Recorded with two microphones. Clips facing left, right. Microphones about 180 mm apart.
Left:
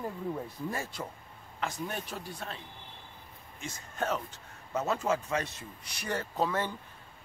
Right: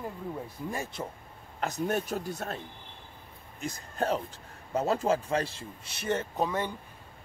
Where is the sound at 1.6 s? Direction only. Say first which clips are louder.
Right 6 dB; 45° right (ahead or behind).